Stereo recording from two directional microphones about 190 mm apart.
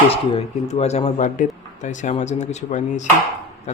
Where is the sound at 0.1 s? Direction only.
35° left (ahead or behind).